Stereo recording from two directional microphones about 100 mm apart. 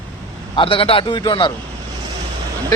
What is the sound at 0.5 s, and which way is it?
A man's voice, 60° left (ahead or behind).